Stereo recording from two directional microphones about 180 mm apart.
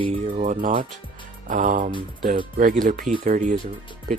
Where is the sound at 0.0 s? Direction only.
35° right (ahead or behind).